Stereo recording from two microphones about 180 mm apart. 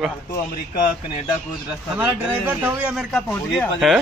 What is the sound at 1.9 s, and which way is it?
A man's voice, 10° right (ahead or behind).